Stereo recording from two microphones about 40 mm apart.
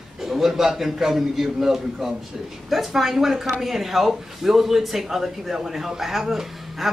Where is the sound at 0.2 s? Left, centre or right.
Centre.